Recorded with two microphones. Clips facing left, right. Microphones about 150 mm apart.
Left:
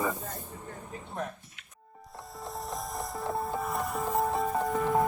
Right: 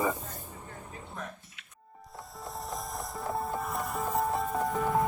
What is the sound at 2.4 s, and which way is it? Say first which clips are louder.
Music: left 1 dB; centre (ahead or behind).